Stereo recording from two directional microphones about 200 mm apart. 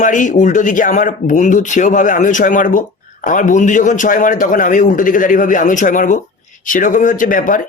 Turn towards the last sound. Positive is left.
turn(degrees=45)  # may be behind; listen again after turning